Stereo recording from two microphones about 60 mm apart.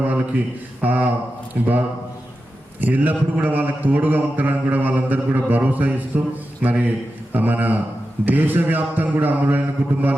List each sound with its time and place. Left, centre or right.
0.0 s a man's voice: right
2.8 s a man's voice: right